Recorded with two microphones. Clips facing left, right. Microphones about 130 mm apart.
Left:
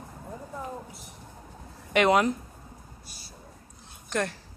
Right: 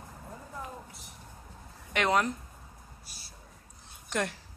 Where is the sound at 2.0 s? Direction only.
5° left (ahead or behind).